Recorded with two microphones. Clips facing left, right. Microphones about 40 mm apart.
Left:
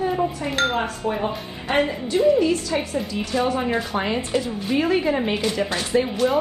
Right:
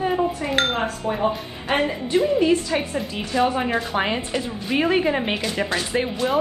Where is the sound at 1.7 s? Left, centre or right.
Right.